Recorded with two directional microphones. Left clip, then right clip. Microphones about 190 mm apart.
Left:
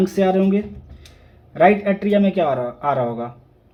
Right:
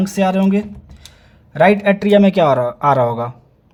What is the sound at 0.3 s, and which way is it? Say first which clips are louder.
Speech: right 1 dB; 30° right (ahead or behind).